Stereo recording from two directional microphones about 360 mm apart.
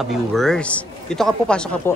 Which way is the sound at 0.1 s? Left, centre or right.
Centre.